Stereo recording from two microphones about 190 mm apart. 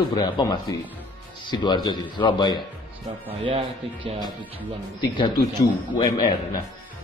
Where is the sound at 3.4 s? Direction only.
30° right (ahead or behind).